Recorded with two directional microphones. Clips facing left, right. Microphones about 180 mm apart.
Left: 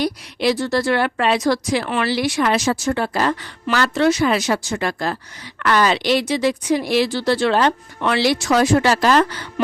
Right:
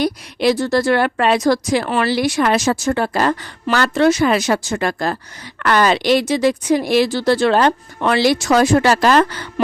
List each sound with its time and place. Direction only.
0.0 s speech: 45° right (ahead or behind)